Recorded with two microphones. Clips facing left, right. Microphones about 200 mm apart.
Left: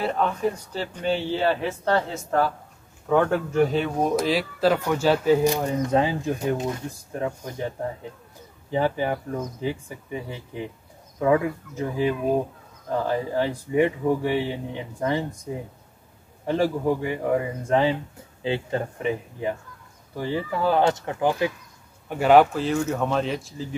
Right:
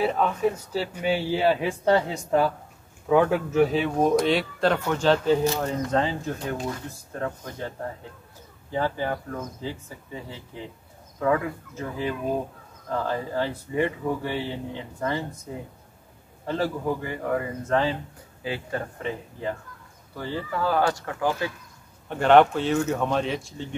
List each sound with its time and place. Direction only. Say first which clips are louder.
0.0 s a man's voice: right 1 dB; 5° right (ahead or behind); by 7.7 s 15° left (ahead or behind)
8.7 s speech: left 3 dB; 15° left (ahead or behind)
16.4 s speech: left 4 dB; 15° left (ahead or behind)
22.1 s speech: left 1 dB; 5° left (ahead or behind)